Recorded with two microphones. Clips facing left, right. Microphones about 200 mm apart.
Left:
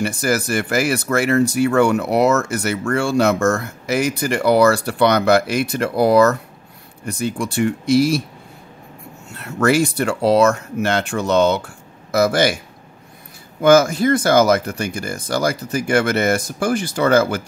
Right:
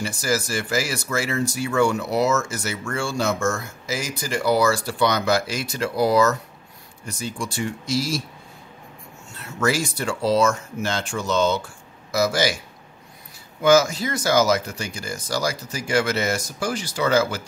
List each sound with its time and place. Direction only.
0.0 s speech: 60° left (ahead or behind)
9.3 s speech: 60° left (ahead or behind)
13.6 s speech: 55° left (ahead or behind)